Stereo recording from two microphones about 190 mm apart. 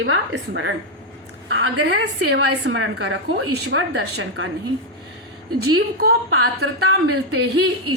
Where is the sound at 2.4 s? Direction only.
70° right (ahead or behind).